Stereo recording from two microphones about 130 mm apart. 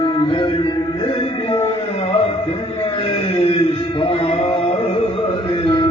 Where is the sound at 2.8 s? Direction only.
45° left (ahead or behind).